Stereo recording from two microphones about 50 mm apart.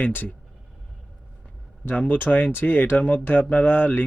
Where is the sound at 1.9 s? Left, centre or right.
Left.